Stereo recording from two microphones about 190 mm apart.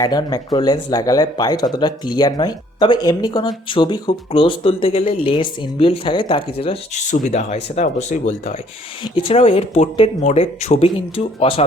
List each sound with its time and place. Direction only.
0.0 s speech: 20° left (ahead or behind)